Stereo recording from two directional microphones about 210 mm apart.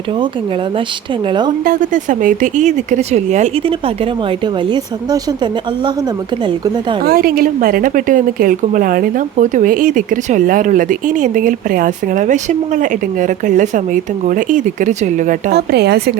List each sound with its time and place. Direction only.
1.3 s a woman's voice: 20° right (ahead or behind)
1.6 s a woman's voice: 40° right (ahead or behind); by 5.9 s 20° right (ahead or behind)
7.0 s a woman's voice: 45° right (ahead or behind)